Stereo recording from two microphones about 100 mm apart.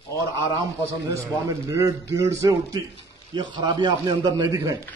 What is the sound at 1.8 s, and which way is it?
Speech, 30° right (ahead or behind).